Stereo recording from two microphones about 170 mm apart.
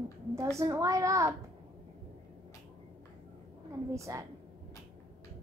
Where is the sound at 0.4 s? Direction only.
20° right (ahead or behind).